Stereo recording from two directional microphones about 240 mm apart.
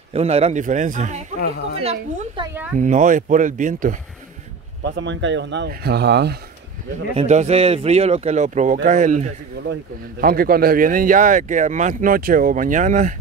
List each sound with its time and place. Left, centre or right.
0.1 s speech: right
4.9 s speech: right
7.2 s speech: right